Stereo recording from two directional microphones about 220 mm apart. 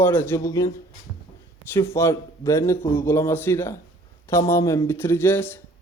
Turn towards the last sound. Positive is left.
turn(degrees=10)  # may be behind; listen again after turning